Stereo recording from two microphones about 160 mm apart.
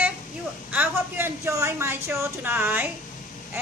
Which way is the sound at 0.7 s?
10° right (ahead or behind).